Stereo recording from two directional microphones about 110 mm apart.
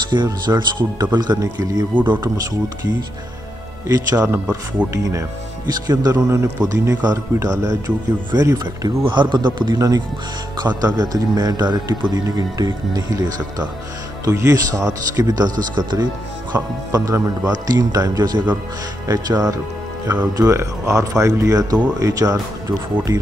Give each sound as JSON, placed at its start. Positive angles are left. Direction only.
{"t": 0.1, "sound": "speech", "side_deg": -45}
{"t": 2.0, "sound": "speech", "side_deg": -20}
{"t": 3.8, "sound": "speech", "side_deg": -35}
{"t": 4.8, "sound": "speech", "side_deg": -10}
{"t": 5.7, "sound": "speech", "side_deg": -35}
{"t": 6.1, "sound": "speech", "side_deg": -25}